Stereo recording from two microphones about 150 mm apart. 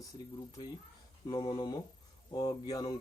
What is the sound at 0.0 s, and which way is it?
Speech, 25° left (ahead or behind).